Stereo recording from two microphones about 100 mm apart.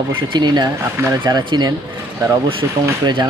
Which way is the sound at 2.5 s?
60° right (ahead or behind).